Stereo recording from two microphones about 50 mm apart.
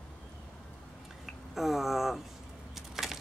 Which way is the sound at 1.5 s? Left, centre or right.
Centre.